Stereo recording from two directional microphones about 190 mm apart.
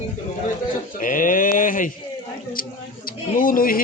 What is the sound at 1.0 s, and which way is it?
Speech, 45° left (ahead or behind).